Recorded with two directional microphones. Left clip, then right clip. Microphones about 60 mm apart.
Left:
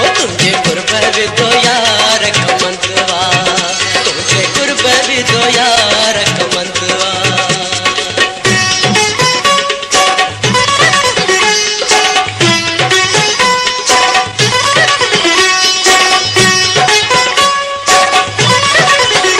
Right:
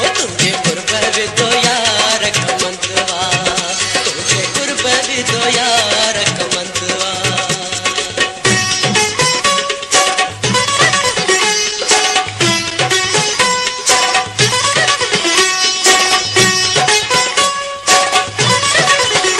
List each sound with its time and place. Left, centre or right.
1.0 s music: right
4.8 s music: right
8.2 s music: right
10.8 s music: right
14.5 s music: right